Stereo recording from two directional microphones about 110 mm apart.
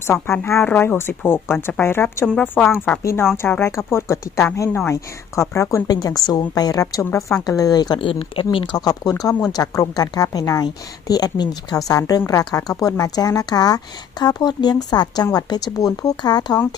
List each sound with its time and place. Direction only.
0.4 s speech: 20° left (ahead or behind); by 7.9 s 35° left (ahead or behind)
7.9 s speech: 55° left (ahead or behind)
8.5 s speech: 40° left (ahead or behind)